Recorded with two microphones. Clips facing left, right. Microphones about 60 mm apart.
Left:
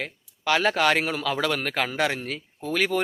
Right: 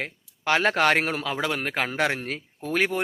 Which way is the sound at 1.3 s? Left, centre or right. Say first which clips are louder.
Left 1 dB; right.